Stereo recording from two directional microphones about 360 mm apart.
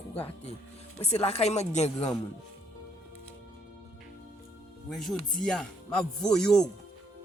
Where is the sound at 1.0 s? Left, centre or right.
Centre.